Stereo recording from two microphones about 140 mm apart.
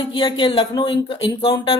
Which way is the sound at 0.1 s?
35° left (ahead or behind).